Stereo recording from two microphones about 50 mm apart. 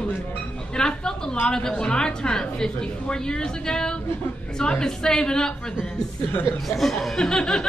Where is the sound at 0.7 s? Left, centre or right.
Centre.